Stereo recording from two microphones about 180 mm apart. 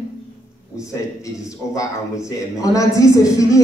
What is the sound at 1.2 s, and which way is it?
A man's voice, 20° left (ahead or behind).